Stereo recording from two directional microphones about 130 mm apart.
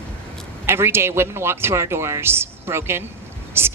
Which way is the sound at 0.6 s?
20° right (ahead or behind).